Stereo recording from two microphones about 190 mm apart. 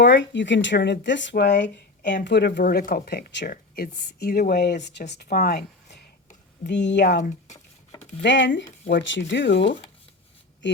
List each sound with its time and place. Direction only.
0.0 s speech: 65° left (ahead or behind)
6.7 s speech: 65° left (ahead or behind)
7.1 s speech: 40° left (ahead or behind)
8.2 s speech: 70° left (ahead or behind)